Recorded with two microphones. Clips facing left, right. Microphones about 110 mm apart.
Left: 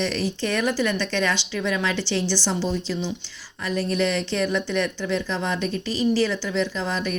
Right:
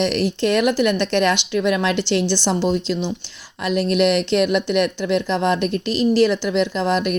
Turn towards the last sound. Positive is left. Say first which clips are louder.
# right 6 dB
turn(degrees=-65)  # may be behind; listen again after turning